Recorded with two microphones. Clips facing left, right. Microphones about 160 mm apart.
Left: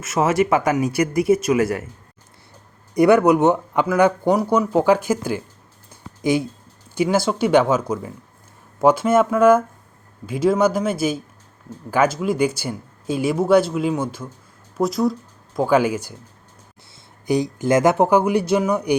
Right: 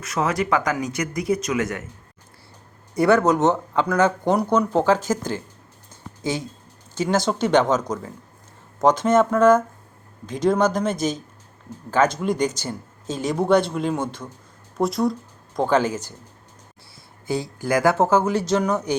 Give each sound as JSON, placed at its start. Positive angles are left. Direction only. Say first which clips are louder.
{"t": 0.0, "sound": "speech", "louder": "left 5 dB", "side_deg": 25}
{"t": 2.9, "sound": "speech", "louder": "left 4 dB", "side_deg": 15}
{"t": 5.9, "sound": "a sound", "louder": "left 7 dB", "side_deg": 10}
{"t": 6.9, "sound": "speech", "louder": "left 2 dB", "side_deg": 10}
{"t": 17.2, "sound": "speech", "louder": "left 5 dB", "side_deg": 15}